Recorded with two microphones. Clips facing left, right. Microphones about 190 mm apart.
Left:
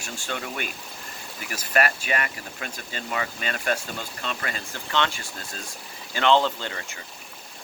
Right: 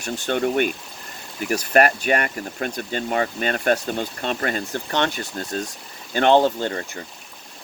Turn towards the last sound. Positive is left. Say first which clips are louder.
# right 8 dB
turn(degrees=-45)  # may be behind; listen again after turning